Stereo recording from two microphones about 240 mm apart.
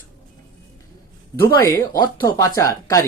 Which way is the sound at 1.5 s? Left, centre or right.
Centre.